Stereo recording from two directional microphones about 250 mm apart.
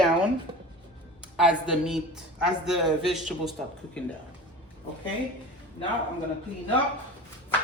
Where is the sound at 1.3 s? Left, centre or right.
Centre.